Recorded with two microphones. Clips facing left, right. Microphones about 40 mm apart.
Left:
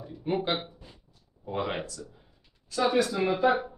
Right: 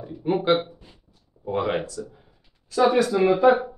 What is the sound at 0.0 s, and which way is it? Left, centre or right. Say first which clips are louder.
Speech: right 6 dB; centre.